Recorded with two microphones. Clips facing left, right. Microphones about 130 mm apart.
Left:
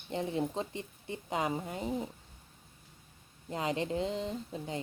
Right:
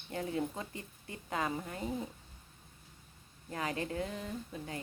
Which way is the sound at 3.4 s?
20° left (ahead or behind).